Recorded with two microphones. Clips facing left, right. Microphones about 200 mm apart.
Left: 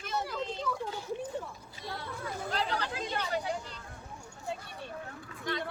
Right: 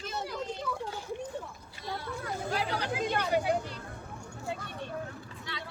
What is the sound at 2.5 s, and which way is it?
Chatter, 10° right (ahead or behind).